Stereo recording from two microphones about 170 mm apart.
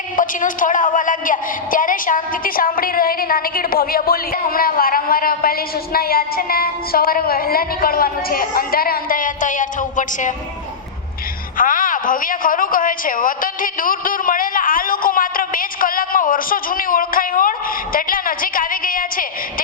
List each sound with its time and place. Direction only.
0.2 s a woman's voice: 50° left (ahead or behind)
11.5 s a woman's voice: 55° left (ahead or behind)